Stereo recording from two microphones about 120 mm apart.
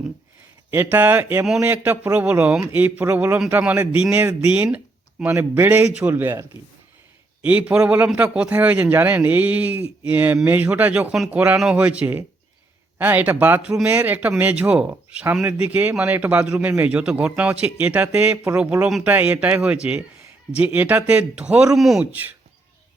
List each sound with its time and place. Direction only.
0.7 s speech: 15° right (ahead or behind)
7.4 s speech: 10° right (ahead or behind)